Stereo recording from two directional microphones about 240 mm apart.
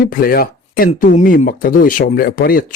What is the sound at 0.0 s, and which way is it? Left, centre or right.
Speech, left.